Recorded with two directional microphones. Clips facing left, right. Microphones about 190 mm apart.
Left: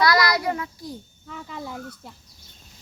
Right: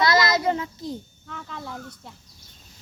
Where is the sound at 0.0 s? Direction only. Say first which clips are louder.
Even; 25° right (ahead or behind).